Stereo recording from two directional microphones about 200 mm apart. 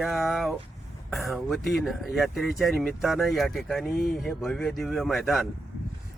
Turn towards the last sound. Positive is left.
turn(degrees=0)  # may be behind; listen again after turning